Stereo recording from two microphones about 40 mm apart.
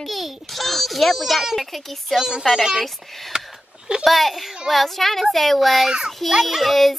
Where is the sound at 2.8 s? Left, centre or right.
Centre.